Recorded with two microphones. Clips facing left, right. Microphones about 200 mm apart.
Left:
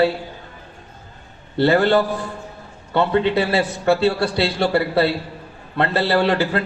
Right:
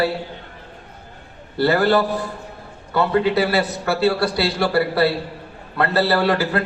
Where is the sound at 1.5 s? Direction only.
25° left (ahead or behind).